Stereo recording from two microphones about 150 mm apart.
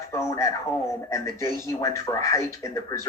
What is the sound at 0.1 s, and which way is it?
Speech, 20° left (ahead or behind).